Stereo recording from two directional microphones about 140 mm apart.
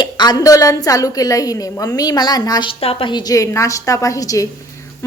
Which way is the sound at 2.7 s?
45° left (ahead or behind).